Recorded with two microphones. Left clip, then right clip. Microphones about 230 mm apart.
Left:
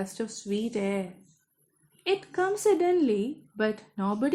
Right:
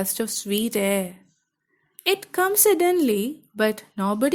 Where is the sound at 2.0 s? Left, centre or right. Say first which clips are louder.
Right 5 dB; right.